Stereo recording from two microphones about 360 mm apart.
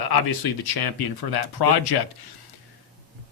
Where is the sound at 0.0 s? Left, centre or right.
Left.